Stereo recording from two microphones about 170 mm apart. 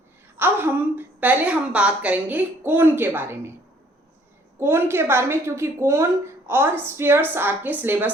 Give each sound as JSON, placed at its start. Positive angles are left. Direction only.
{"t": 0.3, "sound": "a woman's voice", "side_deg": -10}
{"t": 4.6, "sound": "a woman's voice", "side_deg": -15}